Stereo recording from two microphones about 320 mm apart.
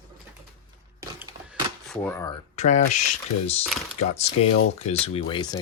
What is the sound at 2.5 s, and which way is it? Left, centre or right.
Speech, left.